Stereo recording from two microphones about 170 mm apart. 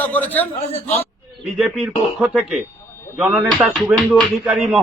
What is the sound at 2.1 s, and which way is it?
Speech, 5° right (ahead or behind).